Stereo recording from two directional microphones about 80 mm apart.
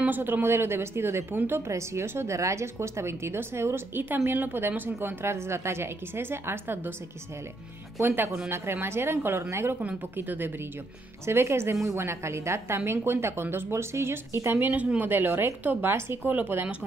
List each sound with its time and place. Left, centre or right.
0.0 s a woman's voice: right
8.5 s a woman's voice: right
9.8 s a woman's voice: right